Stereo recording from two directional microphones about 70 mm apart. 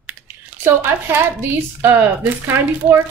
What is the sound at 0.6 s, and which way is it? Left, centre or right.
Speech, right.